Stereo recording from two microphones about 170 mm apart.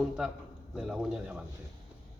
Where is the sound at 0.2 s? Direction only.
Centre (ahead or behind).